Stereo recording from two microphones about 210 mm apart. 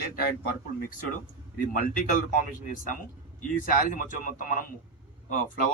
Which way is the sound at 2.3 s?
40° left (ahead or behind).